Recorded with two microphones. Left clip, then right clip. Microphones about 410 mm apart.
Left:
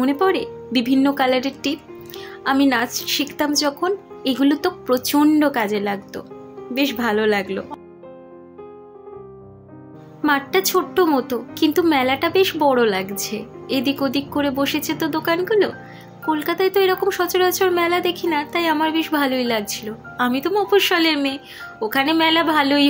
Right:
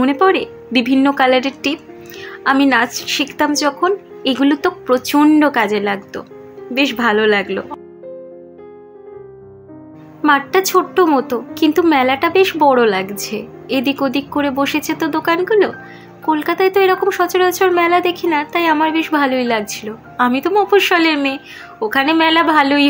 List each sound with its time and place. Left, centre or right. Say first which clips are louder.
0.0 s speech: right 5 dB; left
10.2 s speech: right 5 dB; left